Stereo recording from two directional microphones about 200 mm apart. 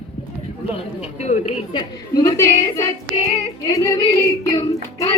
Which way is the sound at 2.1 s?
15° left (ahead or behind).